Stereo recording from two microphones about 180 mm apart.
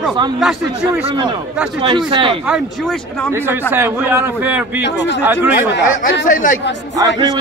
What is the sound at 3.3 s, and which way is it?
A man's voice, 15° right (ahead or behind).